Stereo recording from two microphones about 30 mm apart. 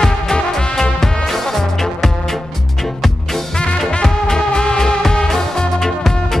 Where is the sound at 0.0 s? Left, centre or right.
Left.